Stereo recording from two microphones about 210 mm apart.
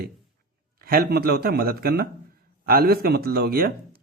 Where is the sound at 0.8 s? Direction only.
45° right (ahead or behind).